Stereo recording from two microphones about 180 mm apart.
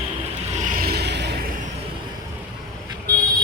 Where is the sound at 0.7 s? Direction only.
60° right (ahead or behind).